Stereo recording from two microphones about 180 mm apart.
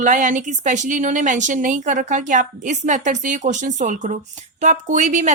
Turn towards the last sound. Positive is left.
turn(degrees=-40)  # may be behind; listen again after turning